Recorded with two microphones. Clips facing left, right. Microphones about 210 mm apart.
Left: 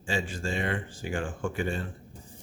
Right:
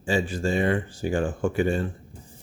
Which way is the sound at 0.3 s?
40° right (ahead or behind).